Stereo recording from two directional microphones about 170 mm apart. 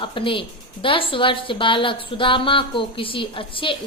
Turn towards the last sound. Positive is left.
turn(degrees=30)  # may be behind; listen again after turning